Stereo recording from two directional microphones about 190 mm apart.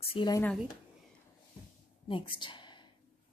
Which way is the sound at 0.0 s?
25° left (ahead or behind).